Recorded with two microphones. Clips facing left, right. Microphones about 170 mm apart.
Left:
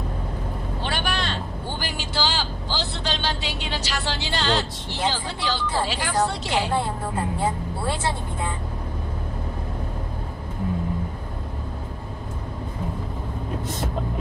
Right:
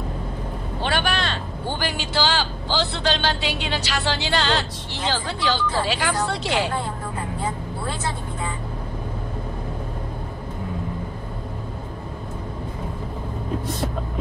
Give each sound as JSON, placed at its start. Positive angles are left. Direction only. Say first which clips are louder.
{"t": 0.8, "sound": "vehicle", "louder": "right 4 dB", "side_deg": -70}
{"t": 5.1, "sound": "speech", "louder": "right 4 dB", "side_deg": -70}